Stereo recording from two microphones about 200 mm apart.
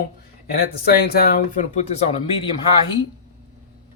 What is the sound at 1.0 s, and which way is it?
Speech, 50° left (ahead or behind).